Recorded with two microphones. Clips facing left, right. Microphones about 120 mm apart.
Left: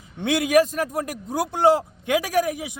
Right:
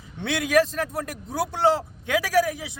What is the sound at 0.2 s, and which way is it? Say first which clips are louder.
A man's voice: left 3 dB; 15° left (ahead or behind).